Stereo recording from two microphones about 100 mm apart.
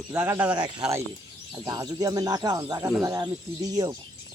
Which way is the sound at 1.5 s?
35° right (ahead or behind).